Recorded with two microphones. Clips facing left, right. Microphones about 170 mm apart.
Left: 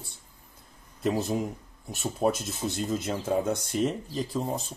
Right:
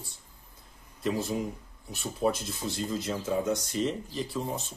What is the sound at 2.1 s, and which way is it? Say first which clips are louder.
Speech: left 1 dB; 50° left (ahead or behind).